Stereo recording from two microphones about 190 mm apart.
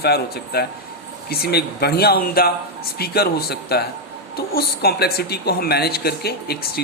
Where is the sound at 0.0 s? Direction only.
55° left (ahead or behind).